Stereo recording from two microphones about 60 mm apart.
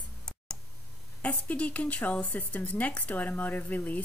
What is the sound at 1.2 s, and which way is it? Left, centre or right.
A woman's voice, left.